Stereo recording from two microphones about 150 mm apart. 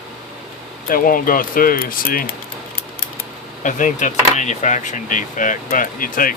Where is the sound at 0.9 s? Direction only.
70° left (ahead or behind).